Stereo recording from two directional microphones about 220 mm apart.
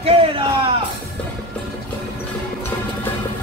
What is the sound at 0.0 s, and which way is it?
Music, 25° right (ahead or behind).